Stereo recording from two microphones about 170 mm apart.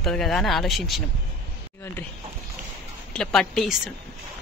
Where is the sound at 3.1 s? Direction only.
Centre (ahead or behind).